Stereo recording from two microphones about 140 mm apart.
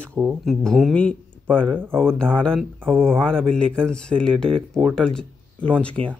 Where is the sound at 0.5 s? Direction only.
Centre (ahead or behind).